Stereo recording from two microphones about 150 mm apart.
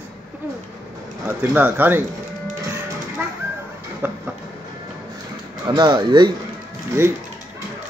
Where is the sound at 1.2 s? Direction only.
15° right (ahead or behind).